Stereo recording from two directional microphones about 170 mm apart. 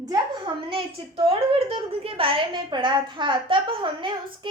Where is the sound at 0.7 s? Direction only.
35° right (ahead or behind).